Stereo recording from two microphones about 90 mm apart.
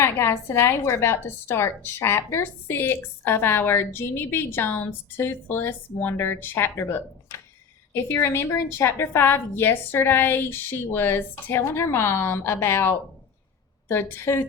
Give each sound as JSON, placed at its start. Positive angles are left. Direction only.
{"t": 0.0, "sound": "a woman's voice", "side_deg": 30}